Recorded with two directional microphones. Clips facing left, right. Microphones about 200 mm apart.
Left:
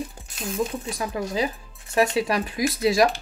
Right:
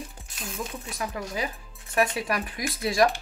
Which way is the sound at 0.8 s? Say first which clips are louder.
Left 5 dB; 30° left (ahead or behind).